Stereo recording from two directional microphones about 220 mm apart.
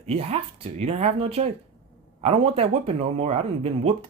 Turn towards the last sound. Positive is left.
turn(degrees=-25)  # may be behind; listen again after turning